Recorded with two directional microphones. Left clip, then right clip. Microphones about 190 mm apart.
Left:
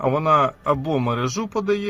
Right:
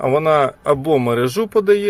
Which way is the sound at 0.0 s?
15° right (ahead or behind).